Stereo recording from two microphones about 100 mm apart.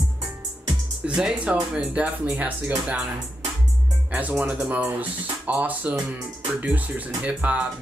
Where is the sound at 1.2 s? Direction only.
10° right (ahead or behind).